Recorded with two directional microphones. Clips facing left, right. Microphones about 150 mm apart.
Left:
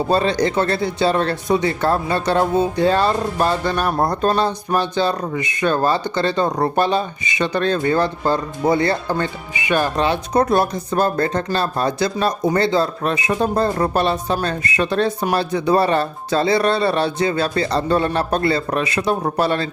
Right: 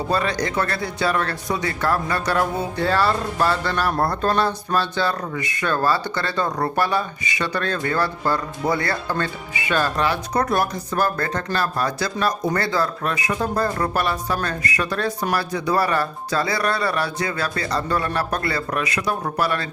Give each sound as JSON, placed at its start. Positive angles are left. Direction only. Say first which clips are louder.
{"t": 0.1, "sound": "speech", "louder": "left 5 dB", "side_deg": 25}